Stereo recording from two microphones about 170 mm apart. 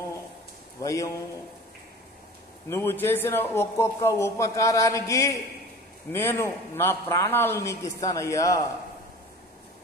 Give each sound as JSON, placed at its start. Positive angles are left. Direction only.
{"t": 0.7, "sound": "speech", "side_deg": 20}
{"t": 2.7, "sound": "a man's voice", "side_deg": 15}